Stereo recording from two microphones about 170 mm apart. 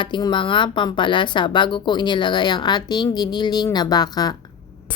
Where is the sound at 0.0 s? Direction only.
30° left (ahead or behind).